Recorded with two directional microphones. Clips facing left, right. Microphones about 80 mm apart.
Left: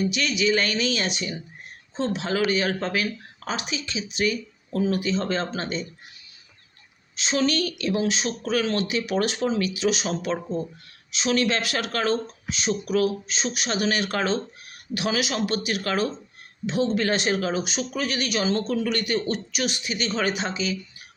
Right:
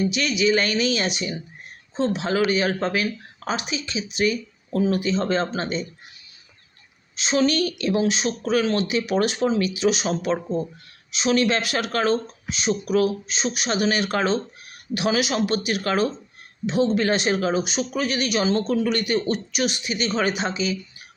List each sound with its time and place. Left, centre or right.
0.0 s speech: right
0.8 s speech: centre
7.2 s speech: right
10.1 s speech: right
11.1 s speech: right
13.7 s speech: centre
20.3 s speech: centre